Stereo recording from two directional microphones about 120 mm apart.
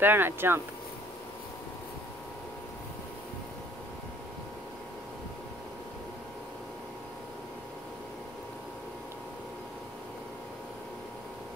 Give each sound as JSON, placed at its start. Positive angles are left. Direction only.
{"t": 0.0, "sound": "speech", "side_deg": -15}